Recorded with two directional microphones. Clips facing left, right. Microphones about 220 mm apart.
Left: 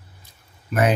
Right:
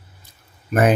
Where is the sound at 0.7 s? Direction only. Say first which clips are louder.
Right 3 dB; 50° right (ahead or behind).